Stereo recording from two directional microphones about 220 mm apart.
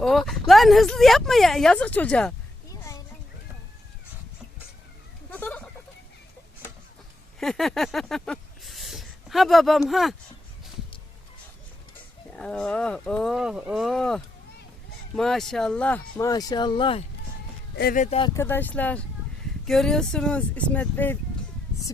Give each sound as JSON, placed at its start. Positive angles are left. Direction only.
{"t": 0.0, "sound": "speech", "side_deg": 0}
{"t": 5.3, "sound": "goat", "side_deg": 5}
{"t": 7.3, "sound": "a sound", "side_deg": 0}
{"t": 12.3, "sound": "speech", "side_deg": 5}
{"t": 17.7, "sound": "speech", "side_deg": 40}
{"t": 18.3, "sound": "speech", "side_deg": 10}